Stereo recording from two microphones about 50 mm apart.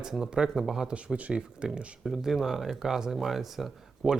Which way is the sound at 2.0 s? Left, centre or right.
Centre.